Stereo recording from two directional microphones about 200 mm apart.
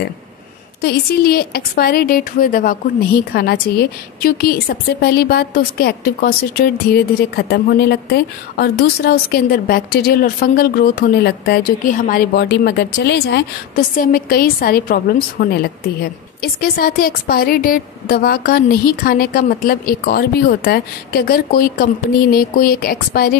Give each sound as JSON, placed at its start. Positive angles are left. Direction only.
{"t": 0.7, "sound": "a woman's voice", "side_deg": 50}
{"t": 13.9, "sound": "a woman's voice", "side_deg": 45}